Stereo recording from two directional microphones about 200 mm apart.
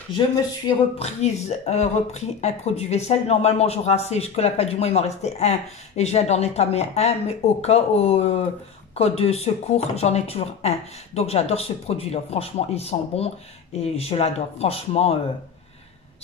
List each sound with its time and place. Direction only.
0.9 s speech: 30° left (ahead or behind)